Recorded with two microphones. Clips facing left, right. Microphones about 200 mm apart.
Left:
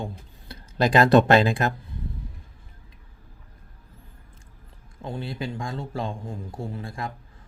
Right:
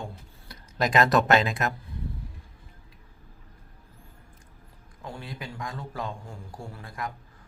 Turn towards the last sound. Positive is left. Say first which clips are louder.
# left 4 dB
turn(degrees=25)  # may be behind; listen again after turning